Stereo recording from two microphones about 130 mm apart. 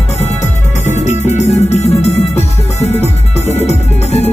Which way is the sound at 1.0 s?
55° left (ahead or behind).